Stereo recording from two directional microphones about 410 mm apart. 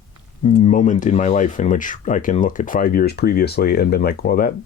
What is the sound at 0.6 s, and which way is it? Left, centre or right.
Speech, centre.